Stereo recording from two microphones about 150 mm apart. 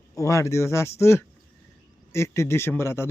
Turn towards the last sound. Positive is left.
turn(degrees=15)  # may be behind; listen again after turning